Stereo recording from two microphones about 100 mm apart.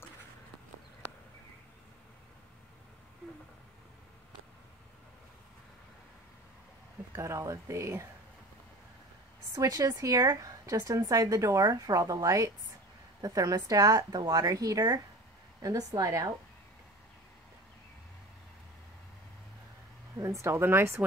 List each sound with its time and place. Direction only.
7.2 s speech: 30° right (ahead or behind)
9.6 s speech: 35° right (ahead or behind)
20.2 s speech: 30° right (ahead or behind)